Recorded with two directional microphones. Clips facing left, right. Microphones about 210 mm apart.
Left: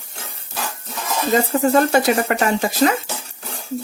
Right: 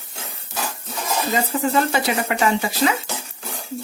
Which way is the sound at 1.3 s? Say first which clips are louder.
Left 6 dB; 45° left (ahead or behind).